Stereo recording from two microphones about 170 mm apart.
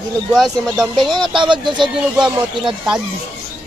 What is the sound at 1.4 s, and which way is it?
Speech, 25° right (ahead or behind).